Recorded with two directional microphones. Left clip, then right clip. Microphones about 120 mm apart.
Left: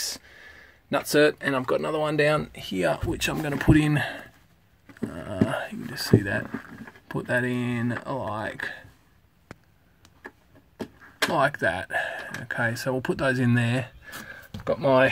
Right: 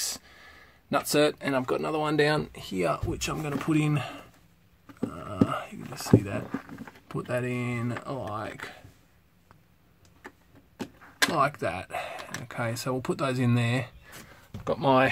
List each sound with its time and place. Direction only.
0.0 s speech: 5° left (ahead or behind)
3.1 s speech: 30° left (ahead or behind)
11.4 s speech: 20° left (ahead or behind)
14.6 s speech: 15° right (ahead or behind)